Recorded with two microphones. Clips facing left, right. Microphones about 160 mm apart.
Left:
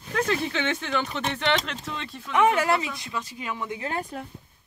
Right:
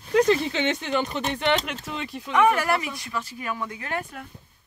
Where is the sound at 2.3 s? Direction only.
20° left (ahead or behind).